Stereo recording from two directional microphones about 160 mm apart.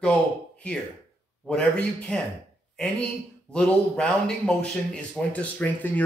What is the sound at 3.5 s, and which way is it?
Speech, 5° left (ahead or behind).